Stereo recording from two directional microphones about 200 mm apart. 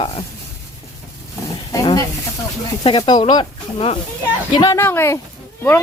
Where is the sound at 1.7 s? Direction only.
20° left (ahead or behind).